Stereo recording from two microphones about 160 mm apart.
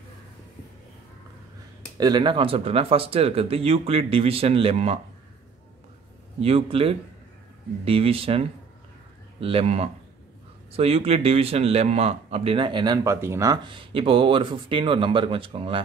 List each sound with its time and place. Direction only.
2.0 s a man's voice: 25° right (ahead or behind)
6.4 s a man's voice: 40° right (ahead or behind)